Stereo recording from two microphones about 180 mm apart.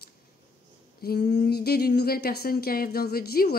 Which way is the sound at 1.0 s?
60° left (ahead or behind).